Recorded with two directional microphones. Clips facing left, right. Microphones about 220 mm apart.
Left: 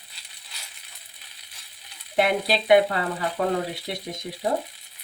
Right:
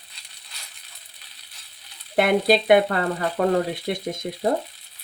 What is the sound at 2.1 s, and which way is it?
Speech, 50° right (ahead or behind).